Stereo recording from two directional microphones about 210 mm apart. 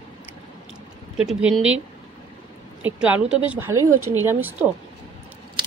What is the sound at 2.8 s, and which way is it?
A woman's voice, 5° right (ahead or behind).